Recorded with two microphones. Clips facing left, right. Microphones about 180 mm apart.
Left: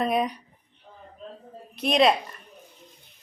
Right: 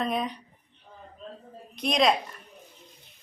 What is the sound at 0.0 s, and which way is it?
Speech, 10° left (ahead or behind).